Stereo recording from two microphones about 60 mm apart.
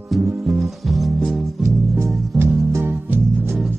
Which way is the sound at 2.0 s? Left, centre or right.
Right.